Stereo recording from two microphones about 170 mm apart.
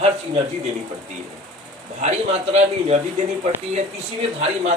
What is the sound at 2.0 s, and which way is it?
Speech, 40° right (ahead or behind).